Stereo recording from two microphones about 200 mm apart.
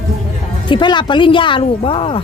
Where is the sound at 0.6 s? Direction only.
25° left (ahead or behind).